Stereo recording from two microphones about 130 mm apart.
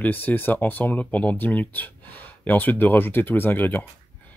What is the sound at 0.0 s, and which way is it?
Speech, 15° left (ahead or behind).